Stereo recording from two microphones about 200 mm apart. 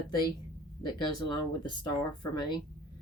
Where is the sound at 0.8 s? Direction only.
20° left (ahead or behind).